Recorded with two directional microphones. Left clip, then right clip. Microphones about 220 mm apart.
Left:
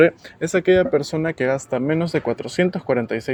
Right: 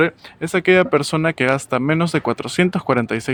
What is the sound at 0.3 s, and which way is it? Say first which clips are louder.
Speech: right 3 dB; 25° right (ahead or behind).